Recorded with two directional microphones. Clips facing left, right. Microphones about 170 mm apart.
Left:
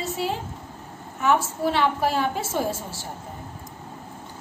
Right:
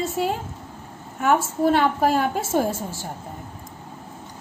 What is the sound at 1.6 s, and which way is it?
A woman's voice, 45° right (ahead or behind).